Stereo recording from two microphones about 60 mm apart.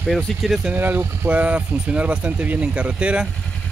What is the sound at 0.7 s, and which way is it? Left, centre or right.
Speech, right.